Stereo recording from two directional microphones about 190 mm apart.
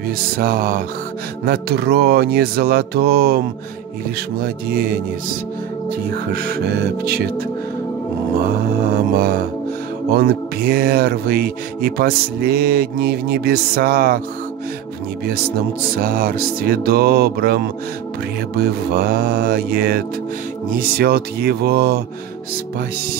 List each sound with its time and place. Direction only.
0.4 s speech: 50° right (ahead or behind)
1.4 s music: 55° right (ahead or behind)
4.4 s speech: 50° right (ahead or behind)
5.9 s music: 55° right (ahead or behind)
8.8 s mantra: 50° right (ahead or behind)
10.1 s speech: 50° right (ahead or behind)
16.0 s speech: 45° right (ahead or behind)
20.7 s music: 50° right (ahead or behind)